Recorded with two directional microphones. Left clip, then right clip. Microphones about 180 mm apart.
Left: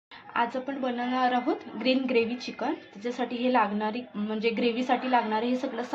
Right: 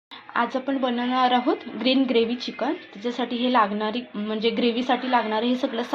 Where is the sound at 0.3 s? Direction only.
20° right (ahead or behind).